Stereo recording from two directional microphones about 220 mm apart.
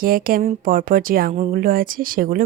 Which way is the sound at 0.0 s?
40° right (ahead or behind).